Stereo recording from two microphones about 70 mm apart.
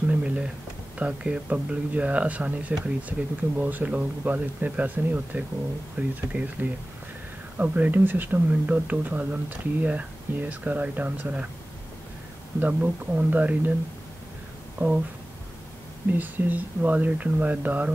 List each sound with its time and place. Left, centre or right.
0.0 s a sound: centre
0.9 s speech: centre
12.5 s speech: right
14.8 s speech: right
16.1 s speech: right